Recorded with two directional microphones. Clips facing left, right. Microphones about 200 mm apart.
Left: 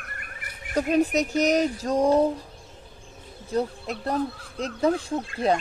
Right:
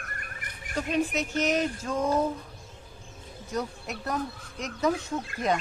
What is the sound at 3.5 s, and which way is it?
Speech, 30° left (ahead or behind).